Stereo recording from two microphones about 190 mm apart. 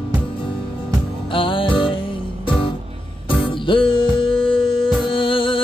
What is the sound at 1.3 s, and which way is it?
Music, 25° left (ahead or behind).